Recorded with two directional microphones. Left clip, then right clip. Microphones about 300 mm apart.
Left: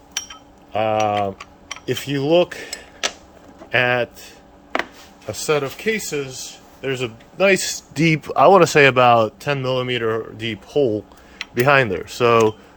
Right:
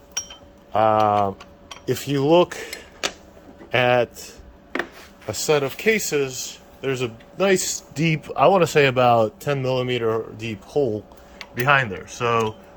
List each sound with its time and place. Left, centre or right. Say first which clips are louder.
0.7 s speech: right 2 dB; centre
5.2 s speech: even; centre
11.5 s speech: left 3 dB; centre